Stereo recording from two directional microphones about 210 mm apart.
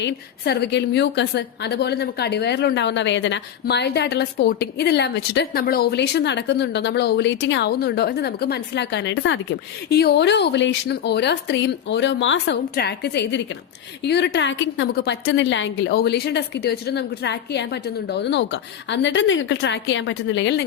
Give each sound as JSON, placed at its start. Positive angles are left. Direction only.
{"t": 0.0, "sound": "a woman's voice", "side_deg": 50}